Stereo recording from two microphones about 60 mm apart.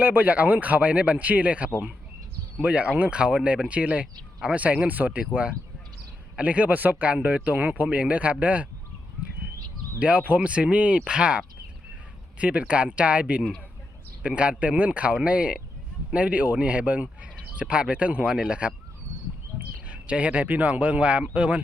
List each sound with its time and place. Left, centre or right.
0.0 s speech: right
10.0 s speech: right
19.9 s speech: centre